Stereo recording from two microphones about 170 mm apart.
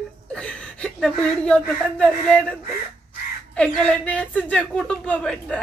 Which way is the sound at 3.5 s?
5° left (ahead or behind).